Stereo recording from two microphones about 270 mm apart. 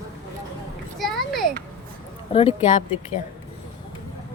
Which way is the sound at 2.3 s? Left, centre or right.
Left.